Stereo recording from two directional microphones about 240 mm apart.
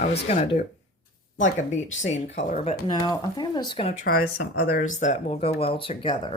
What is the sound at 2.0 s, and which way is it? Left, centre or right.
Speech, left.